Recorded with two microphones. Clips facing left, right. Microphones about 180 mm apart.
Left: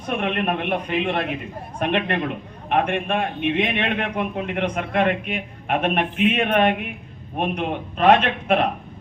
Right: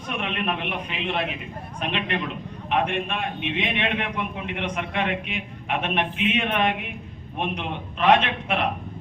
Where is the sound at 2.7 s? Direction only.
50° left (ahead or behind).